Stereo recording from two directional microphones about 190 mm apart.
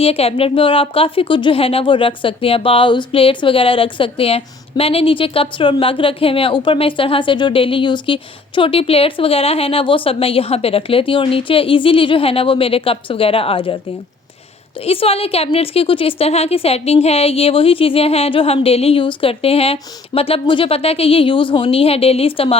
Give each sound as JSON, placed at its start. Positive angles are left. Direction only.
{"t": 0.0, "sound": "a woman's voice", "side_deg": 30}
{"t": 14.8, "sound": "a woman's voice", "side_deg": 30}